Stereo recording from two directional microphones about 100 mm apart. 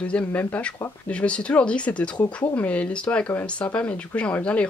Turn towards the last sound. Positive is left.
turn(degrees=10)  # may be behind; listen again after turning